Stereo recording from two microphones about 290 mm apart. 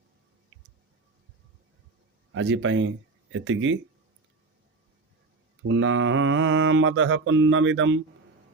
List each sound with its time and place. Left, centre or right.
2.3 s mantra: right
5.6 s mantra: right